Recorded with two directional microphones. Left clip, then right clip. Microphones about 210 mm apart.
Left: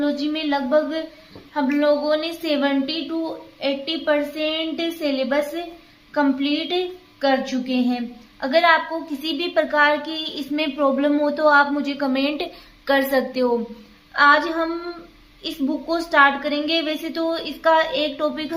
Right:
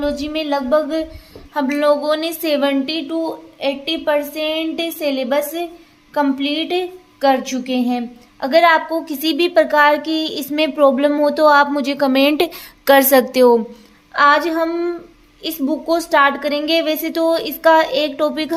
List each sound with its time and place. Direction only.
0.0 s a woman's voice: 35° right (ahead or behind); by 13.6 s 50° right (ahead or behind)
14.1 s a woman's voice: 40° right (ahead or behind)